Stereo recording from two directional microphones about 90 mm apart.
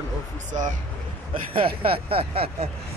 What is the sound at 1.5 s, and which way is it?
Speech, 90° right.